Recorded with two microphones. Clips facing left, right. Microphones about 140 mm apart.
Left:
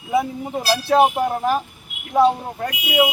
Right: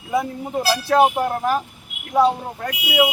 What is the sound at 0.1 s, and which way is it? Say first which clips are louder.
Speech: left 1 dB; 5° left (ahead or behind).